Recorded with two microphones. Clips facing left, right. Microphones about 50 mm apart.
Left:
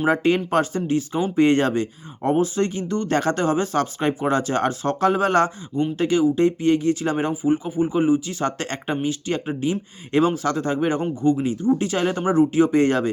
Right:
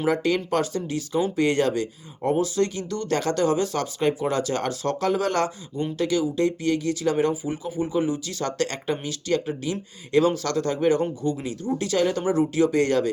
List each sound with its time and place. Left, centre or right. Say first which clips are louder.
0.0 s speech: left 3 dB; left